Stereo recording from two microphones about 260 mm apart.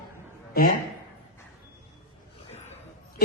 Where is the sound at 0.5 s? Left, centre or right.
Left.